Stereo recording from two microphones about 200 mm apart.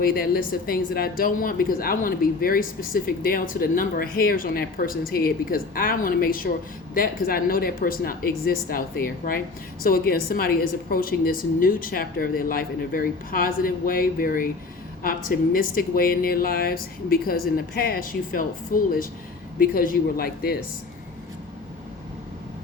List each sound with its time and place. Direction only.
0.0 s speech: 45° left (ahead or behind)